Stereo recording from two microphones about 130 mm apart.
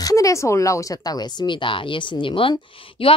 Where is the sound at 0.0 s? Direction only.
25° left (ahead or behind).